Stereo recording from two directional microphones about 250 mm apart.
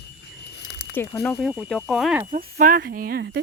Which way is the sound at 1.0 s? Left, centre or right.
Centre.